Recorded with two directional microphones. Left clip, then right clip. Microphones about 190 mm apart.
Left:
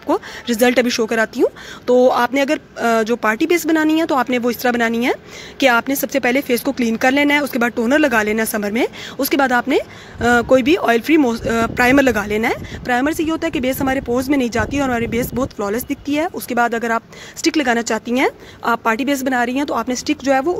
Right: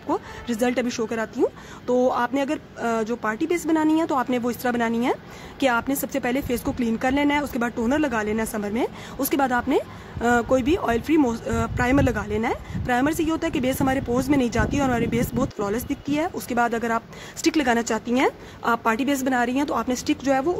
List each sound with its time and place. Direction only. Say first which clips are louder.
0.1 s speech: left 7 dB; 20° left (ahead or behind)